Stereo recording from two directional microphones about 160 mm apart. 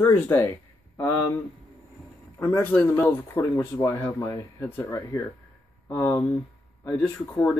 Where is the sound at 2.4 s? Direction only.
20° left (ahead or behind).